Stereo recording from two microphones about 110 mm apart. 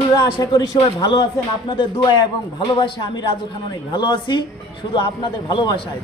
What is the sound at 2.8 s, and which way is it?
A man's voice, 40° left (ahead or behind).